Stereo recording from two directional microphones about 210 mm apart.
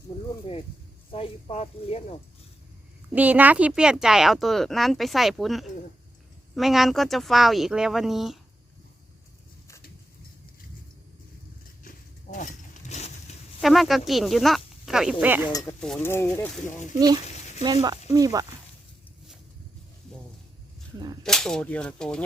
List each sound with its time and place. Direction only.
0.5 s speech: 30° left (ahead or behind)
3.1 s speech: 5° right (ahead or behind)
11.8 s a sound: 40° left (ahead or behind)
13.6 s speech: centre (ahead or behind)
15.8 s speech: 5° left (ahead or behind)
16.9 s speech: 20° right (ahead or behind)
21.2 s speech: centre (ahead or behind)